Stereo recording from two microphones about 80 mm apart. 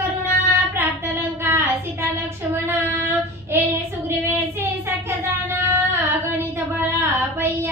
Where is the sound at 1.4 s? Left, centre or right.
Right.